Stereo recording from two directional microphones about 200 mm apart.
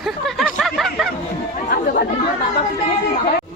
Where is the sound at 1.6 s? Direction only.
50° left (ahead or behind).